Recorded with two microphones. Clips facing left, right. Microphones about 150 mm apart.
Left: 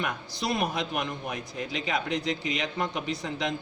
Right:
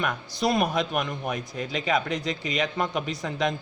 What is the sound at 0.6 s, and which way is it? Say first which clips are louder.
A man's voice: right 4 dB; 55° right (ahead or behind).